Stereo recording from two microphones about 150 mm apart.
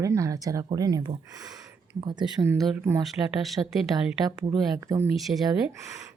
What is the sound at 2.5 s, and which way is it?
Speech, 10° right (ahead or behind).